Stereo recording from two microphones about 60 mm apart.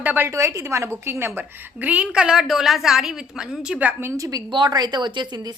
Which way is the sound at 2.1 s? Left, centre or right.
Centre.